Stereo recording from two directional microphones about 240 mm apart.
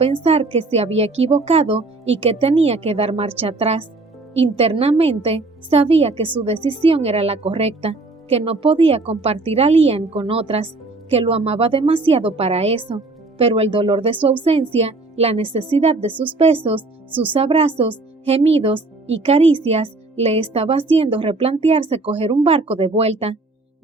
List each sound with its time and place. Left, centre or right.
0.0 s speech: right
17.1 s speech: centre
17.3 s speech: right